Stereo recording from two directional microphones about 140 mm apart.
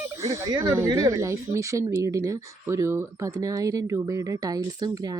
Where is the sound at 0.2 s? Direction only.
25° right (ahead or behind).